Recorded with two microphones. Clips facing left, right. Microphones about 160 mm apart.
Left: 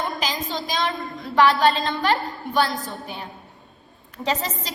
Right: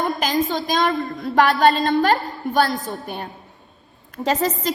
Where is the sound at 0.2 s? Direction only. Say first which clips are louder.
Right 7 dB; 50° right (ahead or behind).